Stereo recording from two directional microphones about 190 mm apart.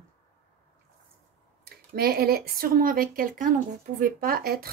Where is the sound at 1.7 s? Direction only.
55° right (ahead or behind).